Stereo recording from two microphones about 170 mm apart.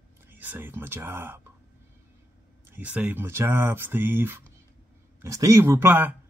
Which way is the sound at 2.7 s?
10° right (ahead or behind).